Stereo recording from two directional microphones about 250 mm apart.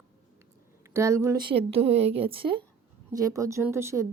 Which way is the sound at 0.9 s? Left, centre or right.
Centre.